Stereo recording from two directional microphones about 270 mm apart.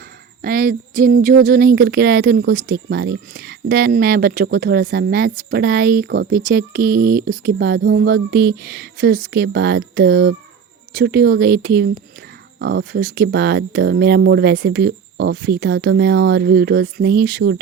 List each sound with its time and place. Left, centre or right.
0.4 s speech: right